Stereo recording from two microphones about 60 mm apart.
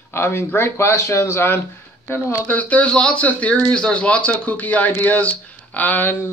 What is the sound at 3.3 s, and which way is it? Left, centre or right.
Speech, left.